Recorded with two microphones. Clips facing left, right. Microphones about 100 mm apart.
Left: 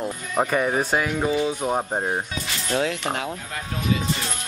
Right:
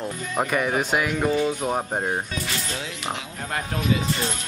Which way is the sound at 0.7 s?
5° right (ahead or behind).